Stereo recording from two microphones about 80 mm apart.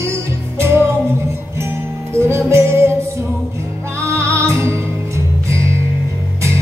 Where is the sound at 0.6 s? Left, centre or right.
Right.